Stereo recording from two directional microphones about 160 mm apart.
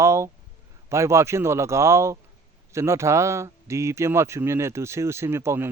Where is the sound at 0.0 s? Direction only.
15° right (ahead or behind).